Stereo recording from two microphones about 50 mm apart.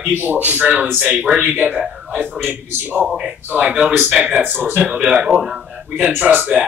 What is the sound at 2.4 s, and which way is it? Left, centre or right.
Speech, right.